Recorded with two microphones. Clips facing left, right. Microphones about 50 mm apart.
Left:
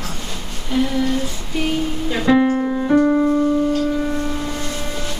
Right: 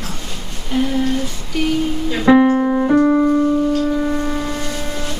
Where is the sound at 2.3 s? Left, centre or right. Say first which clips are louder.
Right 4 dB; centre.